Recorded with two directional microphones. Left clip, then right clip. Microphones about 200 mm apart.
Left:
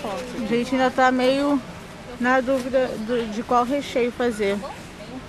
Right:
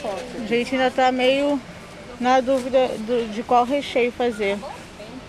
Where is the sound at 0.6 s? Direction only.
10° left (ahead or behind).